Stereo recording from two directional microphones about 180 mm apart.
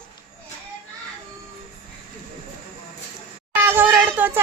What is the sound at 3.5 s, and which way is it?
Speech, 10° right (ahead or behind).